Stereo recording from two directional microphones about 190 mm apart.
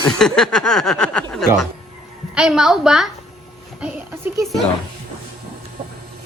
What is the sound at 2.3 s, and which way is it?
Snicker, 5° right (ahead or behind).